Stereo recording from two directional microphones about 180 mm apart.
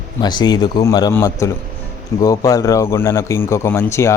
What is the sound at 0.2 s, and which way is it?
Speech, 25° left (ahead or behind).